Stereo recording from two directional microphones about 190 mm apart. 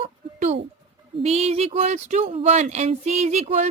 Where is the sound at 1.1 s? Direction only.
35° right (ahead or behind).